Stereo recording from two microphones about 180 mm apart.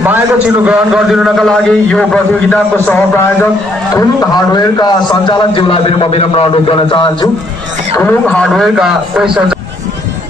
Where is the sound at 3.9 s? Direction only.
20° left (ahead or behind).